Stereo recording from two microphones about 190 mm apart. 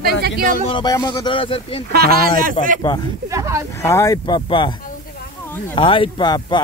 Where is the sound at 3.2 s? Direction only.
15° right (ahead or behind).